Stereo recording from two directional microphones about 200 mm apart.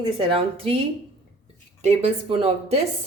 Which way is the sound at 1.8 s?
30° right (ahead or behind).